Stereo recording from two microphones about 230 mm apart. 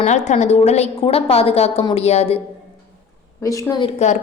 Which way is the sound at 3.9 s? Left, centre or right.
Left.